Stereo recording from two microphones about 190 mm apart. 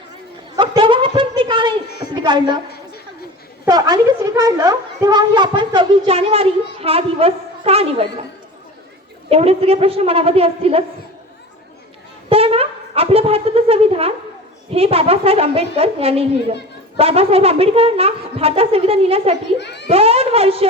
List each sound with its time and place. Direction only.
0.5 s a sound: 20° right (ahead or behind)
2.1 s a woman's voice: 25° right (ahead or behind)
3.7 s a woman's voice: 20° right (ahead or behind)
9.3 s a woman's voice: 30° right (ahead or behind)
12.3 s a sound: 30° right (ahead or behind)
14.7 s a woman's voice: 30° right (ahead or behind)
19.5 s a child's voice: 65° left (ahead or behind)
19.9 s a woman's voice: 30° right (ahead or behind)